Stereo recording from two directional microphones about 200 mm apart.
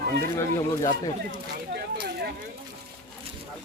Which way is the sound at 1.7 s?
55° right (ahead or behind).